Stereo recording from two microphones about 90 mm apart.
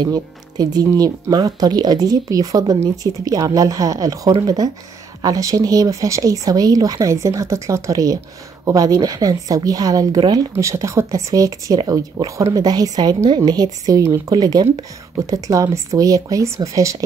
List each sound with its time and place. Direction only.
0.0 s speech: 45° right (ahead or behind)
10.5 s speech: 35° right (ahead or behind)